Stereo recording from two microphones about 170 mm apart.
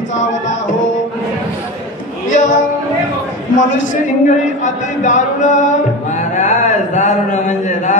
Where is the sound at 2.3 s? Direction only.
45° left (ahead or behind).